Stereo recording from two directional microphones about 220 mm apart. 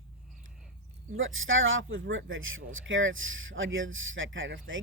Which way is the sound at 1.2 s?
65° right (ahead or behind).